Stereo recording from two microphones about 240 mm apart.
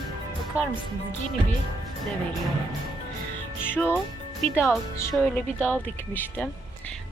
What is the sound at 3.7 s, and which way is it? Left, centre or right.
Speech, centre.